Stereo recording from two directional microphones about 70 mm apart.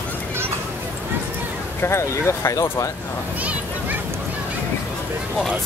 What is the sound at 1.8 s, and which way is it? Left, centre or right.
Speech, left.